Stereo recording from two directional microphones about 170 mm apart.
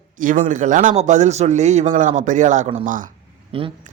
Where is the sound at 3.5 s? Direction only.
30° right (ahead or behind).